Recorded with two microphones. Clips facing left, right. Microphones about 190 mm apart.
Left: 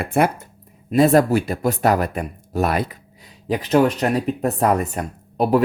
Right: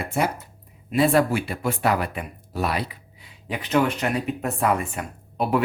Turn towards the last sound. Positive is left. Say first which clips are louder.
# left 6 dB
turn(degrees=40)  # may be behind; listen again after turning